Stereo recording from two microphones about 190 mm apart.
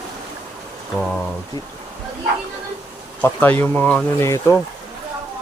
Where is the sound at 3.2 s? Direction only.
10° left (ahead or behind).